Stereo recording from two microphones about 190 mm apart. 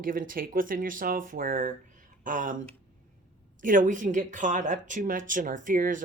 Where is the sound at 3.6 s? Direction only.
45° right (ahead or behind).